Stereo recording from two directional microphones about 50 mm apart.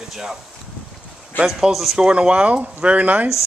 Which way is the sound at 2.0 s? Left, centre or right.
Centre.